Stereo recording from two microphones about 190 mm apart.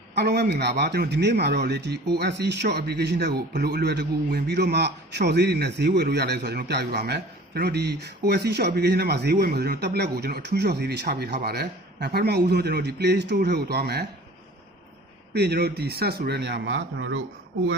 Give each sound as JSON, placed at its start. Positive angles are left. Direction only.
{"t": 0.2, "sound": "a man's voice", "side_deg": -60}
{"t": 15.3, "sound": "a man's voice", "side_deg": -60}